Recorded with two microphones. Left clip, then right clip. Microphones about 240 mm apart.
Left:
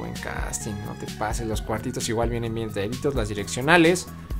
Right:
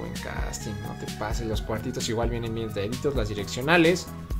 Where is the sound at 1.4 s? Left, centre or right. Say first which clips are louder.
Left 2 dB; centre.